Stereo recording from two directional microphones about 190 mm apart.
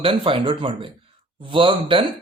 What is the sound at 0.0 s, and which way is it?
A man's voice, 30° right (ahead or behind).